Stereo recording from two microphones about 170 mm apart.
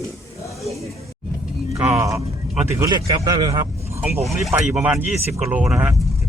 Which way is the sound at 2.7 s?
20° right (ahead or behind).